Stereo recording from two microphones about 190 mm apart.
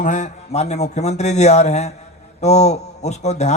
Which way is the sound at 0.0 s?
40° left (ahead or behind).